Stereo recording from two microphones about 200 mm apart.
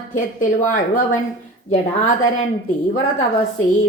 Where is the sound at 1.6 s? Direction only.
35° left (ahead or behind).